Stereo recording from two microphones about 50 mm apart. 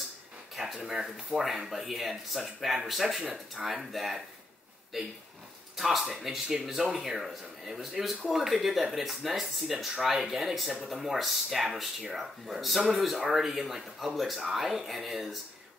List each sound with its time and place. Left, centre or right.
0.7 s speech: centre
1.0 s speech: centre
5.8 s speech: centre